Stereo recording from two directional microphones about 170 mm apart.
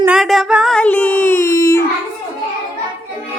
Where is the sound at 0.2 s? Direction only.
Centre (ahead or behind); by 1.8 s 20° left (ahead or behind).